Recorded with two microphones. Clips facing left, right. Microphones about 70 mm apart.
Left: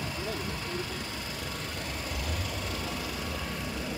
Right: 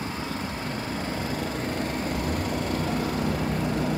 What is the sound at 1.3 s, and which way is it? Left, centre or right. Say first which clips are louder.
Vehicle: right 9 dB; right.